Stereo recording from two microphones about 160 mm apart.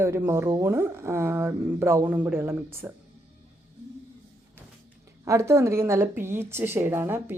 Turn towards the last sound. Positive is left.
turn(degrees=-15)  # may be behind; listen again after turning